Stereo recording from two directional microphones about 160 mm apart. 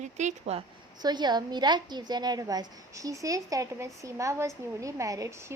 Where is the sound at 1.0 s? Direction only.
25° right (ahead or behind).